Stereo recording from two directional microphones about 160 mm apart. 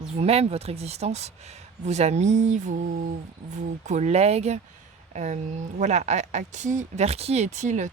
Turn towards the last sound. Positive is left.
turn(degrees=-50)  # may be behind; listen again after turning